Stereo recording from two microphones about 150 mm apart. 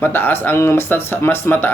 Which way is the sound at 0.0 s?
15° left (ahead or behind).